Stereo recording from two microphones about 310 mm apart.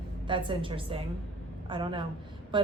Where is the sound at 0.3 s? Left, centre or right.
Centre.